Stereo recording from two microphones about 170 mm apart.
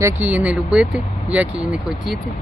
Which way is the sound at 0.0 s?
10° right (ahead or behind).